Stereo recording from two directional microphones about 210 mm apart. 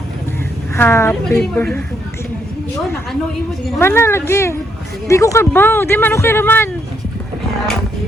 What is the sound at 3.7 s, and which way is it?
Speech, 10° left (ahead or behind).